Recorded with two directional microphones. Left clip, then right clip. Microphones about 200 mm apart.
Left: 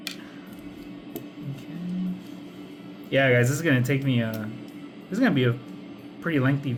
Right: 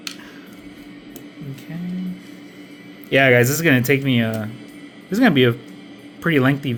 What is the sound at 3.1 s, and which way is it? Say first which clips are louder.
Speech: right 7 dB; 50° right (ahead or behind).